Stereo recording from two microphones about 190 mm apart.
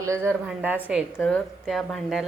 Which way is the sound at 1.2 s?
5° left (ahead or behind).